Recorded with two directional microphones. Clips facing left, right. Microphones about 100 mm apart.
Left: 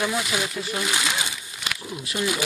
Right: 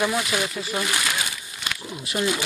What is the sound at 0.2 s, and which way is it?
Speech, centre (ahead or behind).